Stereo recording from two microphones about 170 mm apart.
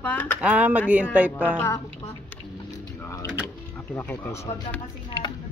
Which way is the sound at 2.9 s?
15° left (ahead or behind).